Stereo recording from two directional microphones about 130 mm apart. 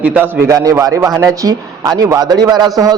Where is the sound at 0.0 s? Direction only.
15° right (ahead or behind).